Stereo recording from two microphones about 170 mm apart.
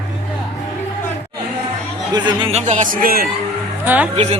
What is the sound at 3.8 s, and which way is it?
Speech, 10° right (ahead or behind).